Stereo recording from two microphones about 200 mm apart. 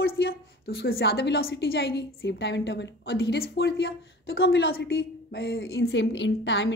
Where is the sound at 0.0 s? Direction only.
50° left (ahead or behind).